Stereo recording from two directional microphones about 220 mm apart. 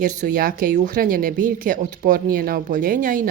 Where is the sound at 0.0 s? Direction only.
40° right (ahead or behind).